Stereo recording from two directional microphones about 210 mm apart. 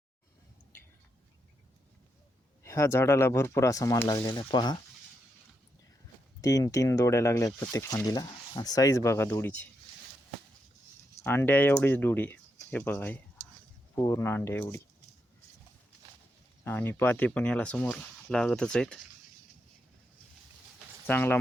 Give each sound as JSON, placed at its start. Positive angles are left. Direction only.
{"t": 2.6, "sound": "speech", "side_deg": 15}
{"t": 4.3, "sound": "speech", "side_deg": 20}
{"t": 6.4, "sound": "speech", "side_deg": 15}
{"t": 11.2, "sound": "speech", "side_deg": 10}
{"t": 16.6, "sound": "speech", "side_deg": 10}
{"t": 21.1, "sound": "speech", "side_deg": 10}